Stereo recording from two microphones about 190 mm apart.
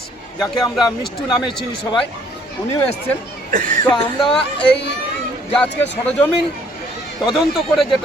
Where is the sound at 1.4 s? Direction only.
25° left (ahead or behind).